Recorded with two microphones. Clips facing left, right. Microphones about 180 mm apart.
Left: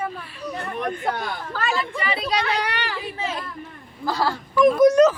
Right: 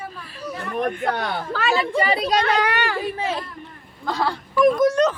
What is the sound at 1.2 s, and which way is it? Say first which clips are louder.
Speech: right 3 dB; 70° right (ahead or behind).